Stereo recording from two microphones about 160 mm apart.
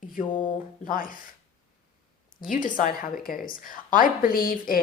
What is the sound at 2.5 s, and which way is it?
Speech, 55° left (ahead or behind).